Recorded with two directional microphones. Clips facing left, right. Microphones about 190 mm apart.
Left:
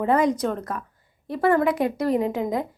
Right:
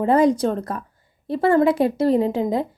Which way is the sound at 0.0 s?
30° right (ahead or behind).